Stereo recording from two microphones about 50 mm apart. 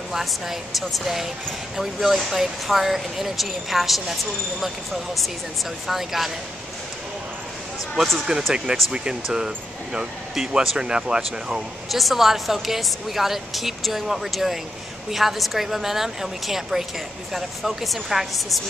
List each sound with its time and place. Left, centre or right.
0.1 s speech: centre
8.3 s speech: centre
11.9 s speech: centre